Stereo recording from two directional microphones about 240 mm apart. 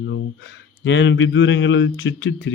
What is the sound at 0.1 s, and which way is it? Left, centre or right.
Speech, left.